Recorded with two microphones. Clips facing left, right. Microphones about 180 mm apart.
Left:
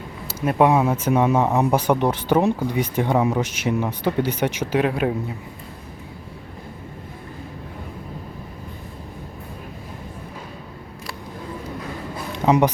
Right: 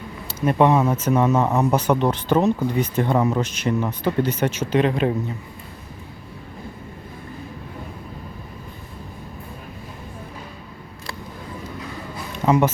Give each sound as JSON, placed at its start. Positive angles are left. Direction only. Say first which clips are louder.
{"t": 0.3, "sound": "speech", "louder": "even", "side_deg": 10}
{"t": 12.5, "sound": "speech", "louder": "left 1 dB", "side_deg": 15}